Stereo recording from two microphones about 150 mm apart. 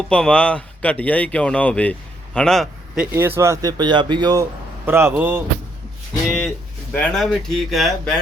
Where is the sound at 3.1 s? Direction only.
15° right (ahead or behind).